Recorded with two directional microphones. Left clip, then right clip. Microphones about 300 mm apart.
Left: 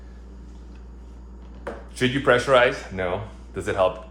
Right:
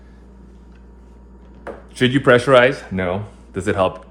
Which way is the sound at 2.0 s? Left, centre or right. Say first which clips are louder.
Right 6 dB; right.